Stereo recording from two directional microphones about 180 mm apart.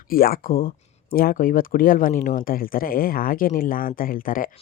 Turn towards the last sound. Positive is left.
turn(degrees=50)  # may be behind; listen again after turning